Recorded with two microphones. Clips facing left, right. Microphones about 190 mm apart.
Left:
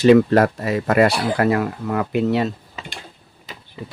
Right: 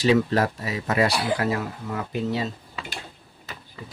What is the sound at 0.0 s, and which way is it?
Speech, 60° left (ahead or behind).